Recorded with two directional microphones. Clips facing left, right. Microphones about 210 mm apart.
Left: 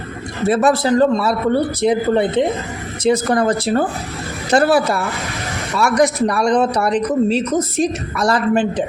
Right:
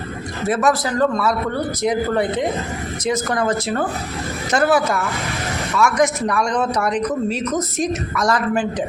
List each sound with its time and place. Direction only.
0.4 s a man's voice: 30° left (ahead or behind)